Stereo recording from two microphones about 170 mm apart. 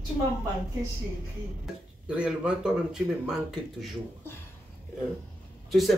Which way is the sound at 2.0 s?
5° right (ahead or behind).